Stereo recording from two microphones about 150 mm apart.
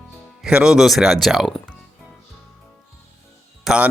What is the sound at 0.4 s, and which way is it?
Speech, 5° right (ahead or behind).